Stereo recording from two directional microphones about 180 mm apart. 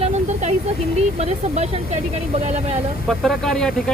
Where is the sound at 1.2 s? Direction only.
35° right (ahead or behind).